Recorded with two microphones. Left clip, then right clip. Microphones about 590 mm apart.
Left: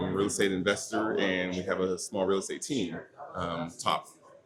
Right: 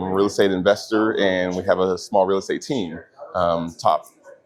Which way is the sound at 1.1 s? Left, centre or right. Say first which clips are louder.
Right 9 dB; right.